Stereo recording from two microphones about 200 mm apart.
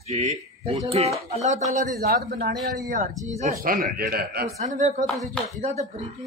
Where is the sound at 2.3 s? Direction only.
55° right (ahead or behind).